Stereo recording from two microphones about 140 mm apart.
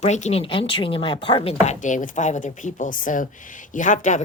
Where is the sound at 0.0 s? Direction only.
55° left (ahead or behind).